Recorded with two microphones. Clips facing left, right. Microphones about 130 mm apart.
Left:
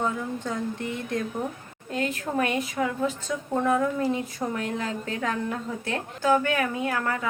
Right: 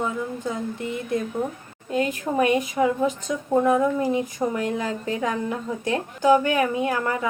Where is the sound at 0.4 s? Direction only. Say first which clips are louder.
Right 2 dB; 10° right (ahead or behind).